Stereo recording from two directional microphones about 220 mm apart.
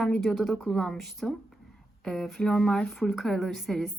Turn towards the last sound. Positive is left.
turn(degrees=0)  # may be behind; listen again after turning